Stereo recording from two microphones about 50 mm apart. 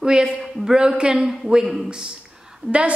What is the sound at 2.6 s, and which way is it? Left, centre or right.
Speech, right.